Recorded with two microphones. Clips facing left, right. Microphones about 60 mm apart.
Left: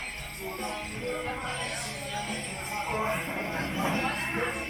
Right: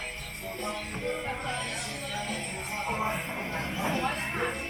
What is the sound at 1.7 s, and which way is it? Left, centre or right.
Music, centre.